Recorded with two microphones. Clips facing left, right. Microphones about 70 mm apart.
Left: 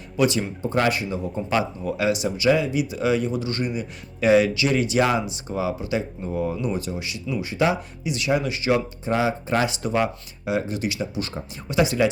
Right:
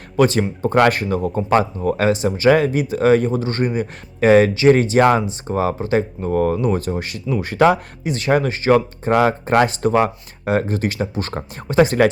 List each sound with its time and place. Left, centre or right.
0.2 s speech: right
0.6 s speech: right
7.5 s speech: right
8.1 s speech: right
9.1 s speech: right